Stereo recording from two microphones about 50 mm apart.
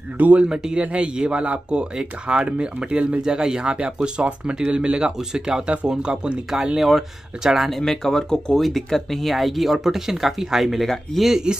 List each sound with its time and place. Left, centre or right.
0.4 s speech: centre
3.2 s speech: centre
6.5 s speech: centre
7.8 s speech: centre
8.5 s speech: centre